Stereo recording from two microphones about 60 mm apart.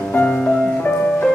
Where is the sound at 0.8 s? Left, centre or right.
Left.